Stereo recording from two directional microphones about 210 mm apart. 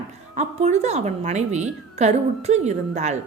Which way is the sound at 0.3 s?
35° right (ahead or behind).